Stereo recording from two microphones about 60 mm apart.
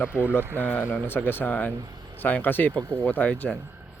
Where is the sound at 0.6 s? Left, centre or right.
Left.